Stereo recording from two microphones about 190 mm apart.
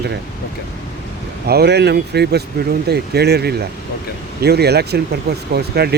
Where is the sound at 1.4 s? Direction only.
55° right (ahead or behind).